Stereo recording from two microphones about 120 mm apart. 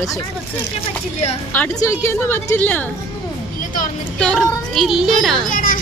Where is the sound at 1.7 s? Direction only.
30° left (ahead or behind).